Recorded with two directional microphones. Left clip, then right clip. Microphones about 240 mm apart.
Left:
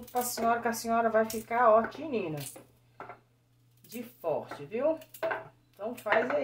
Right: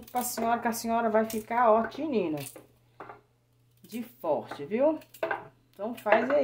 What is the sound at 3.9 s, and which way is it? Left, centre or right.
Speech, right.